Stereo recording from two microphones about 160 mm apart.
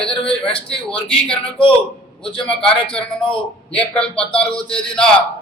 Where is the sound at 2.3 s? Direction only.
5° left (ahead or behind).